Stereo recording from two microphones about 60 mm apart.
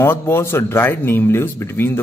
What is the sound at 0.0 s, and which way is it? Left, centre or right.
Speech, left.